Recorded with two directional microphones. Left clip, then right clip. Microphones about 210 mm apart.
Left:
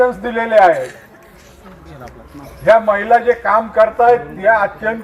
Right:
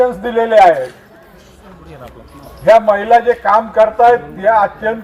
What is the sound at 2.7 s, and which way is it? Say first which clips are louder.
A man's voice: right 2 dB; centre (ahead or behind).